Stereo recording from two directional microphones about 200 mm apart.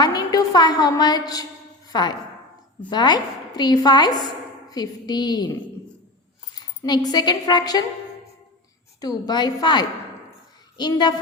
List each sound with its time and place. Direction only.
0.0 s a woman's voice: 20° left (ahead or behind)
6.6 s speech: 20° left (ahead or behind)
9.0 s a woman's voice: 20° left (ahead or behind)